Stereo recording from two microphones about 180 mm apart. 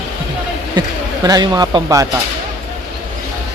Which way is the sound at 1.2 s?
20° right (ahead or behind).